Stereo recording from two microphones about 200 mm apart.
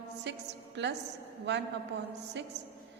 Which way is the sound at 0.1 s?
60° right (ahead or behind).